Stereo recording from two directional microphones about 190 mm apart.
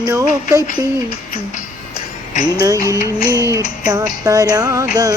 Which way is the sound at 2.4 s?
20° right (ahead or behind).